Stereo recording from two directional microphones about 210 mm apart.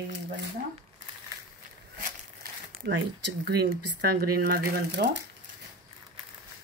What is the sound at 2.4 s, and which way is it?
Crumpling, 50° right (ahead or behind).